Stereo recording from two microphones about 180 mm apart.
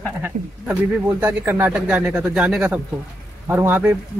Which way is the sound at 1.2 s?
10° right (ahead or behind).